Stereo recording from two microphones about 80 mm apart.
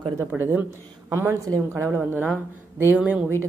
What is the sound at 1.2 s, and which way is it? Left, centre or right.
Speech, right.